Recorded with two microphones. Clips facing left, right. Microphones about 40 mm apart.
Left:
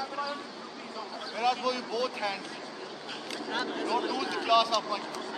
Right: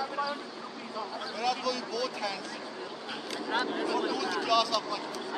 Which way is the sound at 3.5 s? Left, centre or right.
Centre.